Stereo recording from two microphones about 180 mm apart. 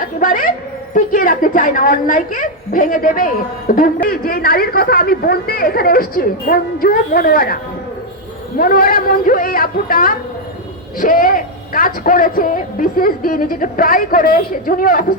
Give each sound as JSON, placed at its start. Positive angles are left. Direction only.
{"t": 0.0, "sound": "music", "side_deg": 50}
{"t": 0.9, "sound": "a man's voice", "side_deg": 50}
{"t": 8.5, "sound": "a man's voice", "side_deg": 55}